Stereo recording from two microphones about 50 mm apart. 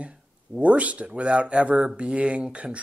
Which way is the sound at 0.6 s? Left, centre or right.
Right.